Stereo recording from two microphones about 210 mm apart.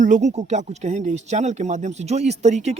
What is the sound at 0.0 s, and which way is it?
Speech, 35° right (ahead or behind).